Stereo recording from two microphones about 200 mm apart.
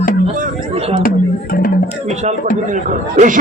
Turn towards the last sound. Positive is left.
turn(degrees=-40)  # may be behind; listen again after turning